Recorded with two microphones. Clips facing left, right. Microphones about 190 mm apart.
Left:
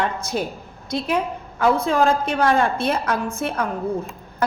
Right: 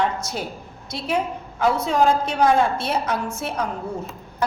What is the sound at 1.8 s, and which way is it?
A woman's voice, 55° left (ahead or behind).